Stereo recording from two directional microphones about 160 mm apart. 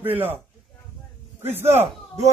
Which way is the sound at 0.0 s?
10° right (ahead or behind).